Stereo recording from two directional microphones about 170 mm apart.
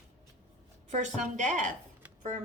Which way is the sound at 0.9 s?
45° right (ahead or behind).